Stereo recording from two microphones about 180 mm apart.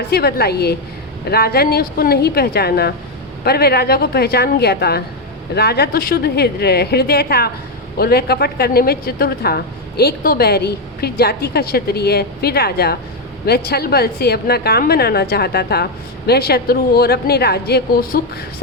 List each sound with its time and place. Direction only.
0.1 s a woman's voice: 60° left (ahead or behind)